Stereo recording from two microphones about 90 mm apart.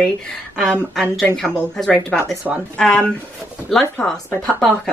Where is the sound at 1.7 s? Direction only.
10° left (ahead or behind).